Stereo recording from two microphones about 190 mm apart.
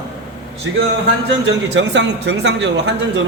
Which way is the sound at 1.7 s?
70° right (ahead or behind).